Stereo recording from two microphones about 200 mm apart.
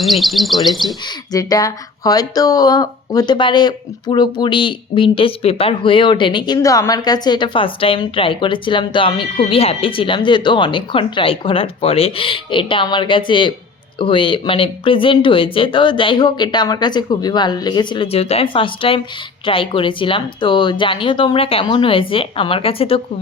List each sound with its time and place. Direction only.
0.0 s speech: centre (ahead or behind)
1.3 s speech: 20° left (ahead or behind)